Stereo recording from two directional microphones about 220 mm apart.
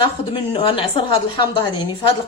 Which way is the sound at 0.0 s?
25° left (ahead or behind).